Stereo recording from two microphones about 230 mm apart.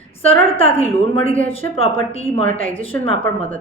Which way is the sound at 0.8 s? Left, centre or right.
Left.